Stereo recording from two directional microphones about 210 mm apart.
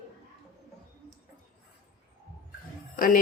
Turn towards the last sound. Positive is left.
turn(degrees=40)  # may be behind; listen again after turning